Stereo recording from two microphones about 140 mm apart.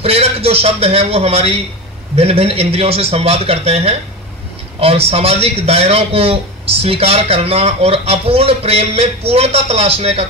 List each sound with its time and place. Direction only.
0.0 s a man's voice: 45° right (ahead or behind)